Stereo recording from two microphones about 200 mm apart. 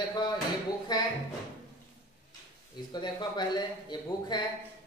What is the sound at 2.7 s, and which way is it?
Speech, 20° left (ahead or behind).